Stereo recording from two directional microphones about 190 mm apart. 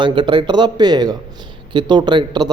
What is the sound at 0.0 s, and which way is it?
Speech, 25° right (ahead or behind).